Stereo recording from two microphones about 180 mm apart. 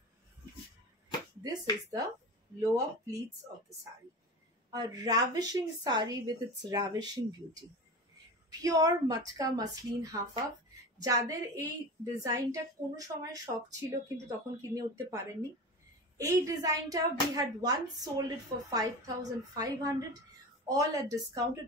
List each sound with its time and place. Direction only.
1.4 s a woman's voice: 20° right (ahead or behind)
4.6 s a woman's voice: 20° right (ahead or behind)
8.5 s a woman's voice: 20° right (ahead or behind)
16.2 s a woman's voice: 20° right (ahead or behind)